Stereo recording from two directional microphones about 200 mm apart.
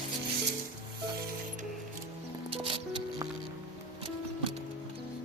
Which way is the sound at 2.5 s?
30° right (ahead or behind).